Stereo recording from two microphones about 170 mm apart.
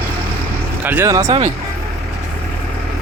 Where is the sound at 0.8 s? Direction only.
10° right (ahead or behind).